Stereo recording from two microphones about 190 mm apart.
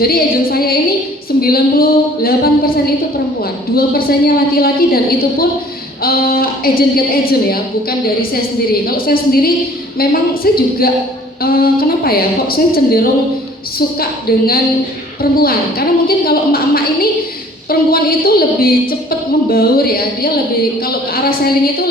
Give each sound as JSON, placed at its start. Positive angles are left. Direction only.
{"t": 0.0, "sound": "a woman's voice", "side_deg": 50}
{"t": 3.8, "sound": "a woman's voice", "side_deg": 50}
{"t": 6.0, "sound": "a woman's voice", "side_deg": 50}